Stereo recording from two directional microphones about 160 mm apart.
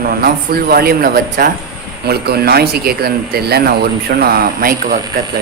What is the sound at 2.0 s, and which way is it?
A man's voice, 80° right.